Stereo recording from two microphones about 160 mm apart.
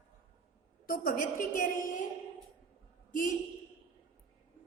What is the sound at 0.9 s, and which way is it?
A woman's voice, 60° left (ahead or behind).